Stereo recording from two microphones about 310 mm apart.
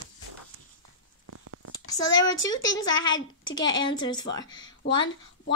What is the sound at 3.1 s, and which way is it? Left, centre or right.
Speech, left.